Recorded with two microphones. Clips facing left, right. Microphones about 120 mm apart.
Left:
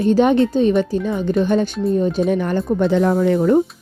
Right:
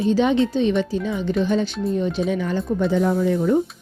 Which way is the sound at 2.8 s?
65° left (ahead or behind).